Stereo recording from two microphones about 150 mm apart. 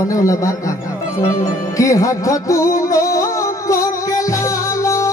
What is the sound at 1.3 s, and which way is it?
Music, 20° left (ahead or behind).